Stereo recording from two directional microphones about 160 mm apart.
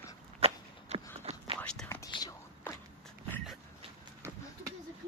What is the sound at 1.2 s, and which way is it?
Whispering, 35° right (ahead or behind).